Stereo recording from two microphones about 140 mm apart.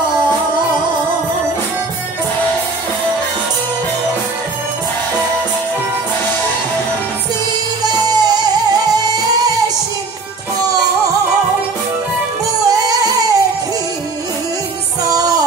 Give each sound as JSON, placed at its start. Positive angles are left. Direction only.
{"t": 7.8, "sound": "music", "side_deg": -30}
{"t": 12.6, "sound": "music", "side_deg": -25}
{"t": 15.0, "sound": "music", "side_deg": -25}